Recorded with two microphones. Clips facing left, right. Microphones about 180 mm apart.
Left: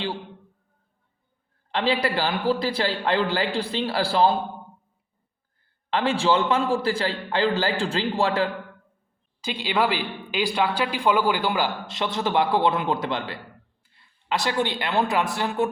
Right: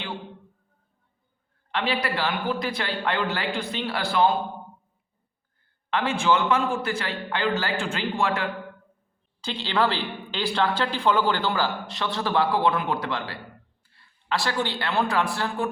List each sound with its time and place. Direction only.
1.7 s a man's voice: 30° left (ahead or behind)
5.9 s a man's voice: 30° left (ahead or behind)
9.4 s speech: 10° left (ahead or behind)